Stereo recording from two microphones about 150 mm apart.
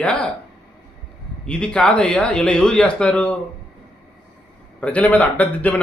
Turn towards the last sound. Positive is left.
turn(degrees=10)  # may be behind; listen again after turning